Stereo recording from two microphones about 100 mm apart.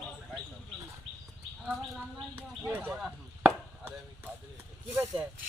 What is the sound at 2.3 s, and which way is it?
Speech, 20° right (ahead or behind).